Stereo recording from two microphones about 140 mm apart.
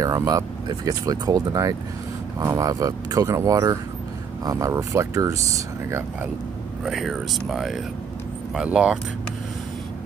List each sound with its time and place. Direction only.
0.0 s speech: 25° right (ahead or behind)
6.8 s speech: centre (ahead or behind)